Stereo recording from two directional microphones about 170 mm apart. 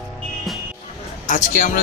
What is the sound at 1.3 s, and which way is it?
Speech, 50° left (ahead or behind).